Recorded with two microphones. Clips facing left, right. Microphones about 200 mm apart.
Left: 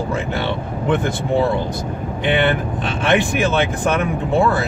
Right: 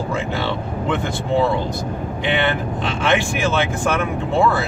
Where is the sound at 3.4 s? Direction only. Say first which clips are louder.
Left 1 dB; 20° left (ahead or behind).